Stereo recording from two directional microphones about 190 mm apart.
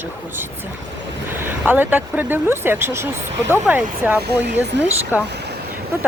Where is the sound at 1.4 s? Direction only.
10° right (ahead or behind).